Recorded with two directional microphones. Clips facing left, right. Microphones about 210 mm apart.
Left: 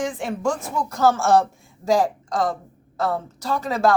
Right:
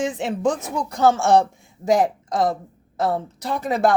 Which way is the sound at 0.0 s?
20° right (ahead or behind).